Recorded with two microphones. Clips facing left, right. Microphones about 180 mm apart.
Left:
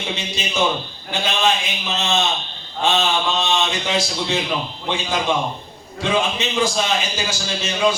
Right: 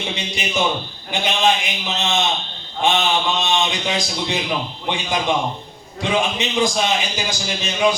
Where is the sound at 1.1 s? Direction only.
15° right (ahead or behind).